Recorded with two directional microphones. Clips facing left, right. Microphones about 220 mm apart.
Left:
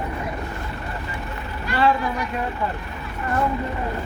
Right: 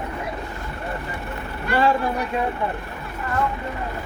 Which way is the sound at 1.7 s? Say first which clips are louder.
Right 1 dB; 50° right (ahead or behind).